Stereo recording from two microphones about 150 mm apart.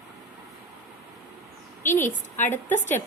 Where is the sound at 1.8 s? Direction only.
15° left (ahead or behind).